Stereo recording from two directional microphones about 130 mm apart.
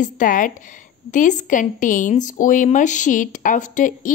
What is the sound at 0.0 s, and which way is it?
Speech, 90° left.